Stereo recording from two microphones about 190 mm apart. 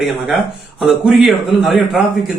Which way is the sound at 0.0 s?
Centre (ahead or behind).